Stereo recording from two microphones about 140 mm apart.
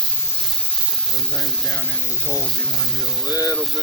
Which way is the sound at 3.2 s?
25° left (ahead or behind).